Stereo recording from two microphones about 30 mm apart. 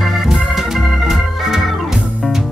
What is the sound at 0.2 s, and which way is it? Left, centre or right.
Organ, centre.